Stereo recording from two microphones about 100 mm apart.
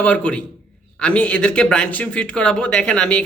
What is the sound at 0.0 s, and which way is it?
Speech, 10° left (ahead or behind).